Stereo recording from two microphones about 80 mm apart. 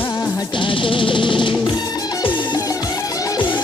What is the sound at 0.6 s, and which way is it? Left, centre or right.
Music, left.